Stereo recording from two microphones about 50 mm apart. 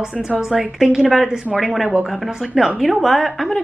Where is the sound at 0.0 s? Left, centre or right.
Centre.